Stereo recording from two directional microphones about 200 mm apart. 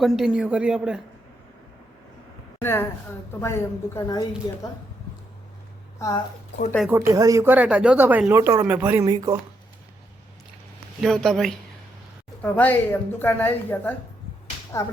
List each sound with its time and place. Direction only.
0.0 s a man's voice: centre (ahead or behind)
2.6 s a woman's voice: 10° left (ahead or behind)
7.1 s speech: 15° right (ahead or behind)
11.0 s a man's voice: centre (ahead or behind)